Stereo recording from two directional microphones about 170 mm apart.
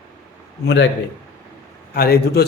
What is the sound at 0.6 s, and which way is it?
Speech, 90° left.